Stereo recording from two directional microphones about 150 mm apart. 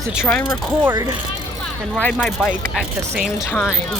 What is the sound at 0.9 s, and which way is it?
Speech, 30° right (ahead or behind).